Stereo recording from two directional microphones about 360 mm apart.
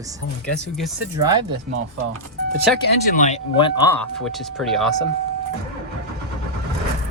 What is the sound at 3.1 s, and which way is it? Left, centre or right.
Speech, centre.